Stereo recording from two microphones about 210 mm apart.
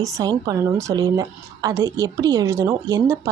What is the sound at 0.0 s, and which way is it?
A woman's voice, 15° right (ahead or behind).